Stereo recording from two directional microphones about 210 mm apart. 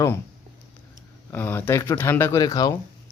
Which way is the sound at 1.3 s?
10° left (ahead or behind).